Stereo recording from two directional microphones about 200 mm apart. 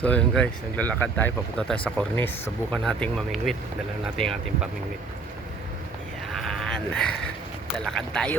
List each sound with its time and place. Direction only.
0.0 s speech: 5° left (ahead or behind)
6.4 s sheep: 5° left (ahead or behind)
7.9 s speech: 5° left (ahead or behind)